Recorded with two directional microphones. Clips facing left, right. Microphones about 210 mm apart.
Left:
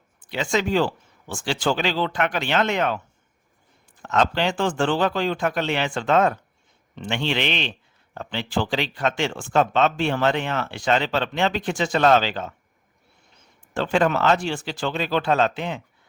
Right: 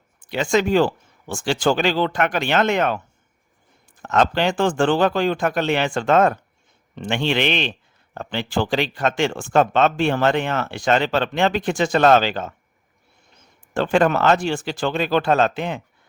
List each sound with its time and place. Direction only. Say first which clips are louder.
0.3 s speech: right 4 dB; 50° right (ahead or behind)
4.0 s speech: right 3 dB; 50° right (ahead or behind)
13.7 s speech: right 3 dB; 50° right (ahead or behind)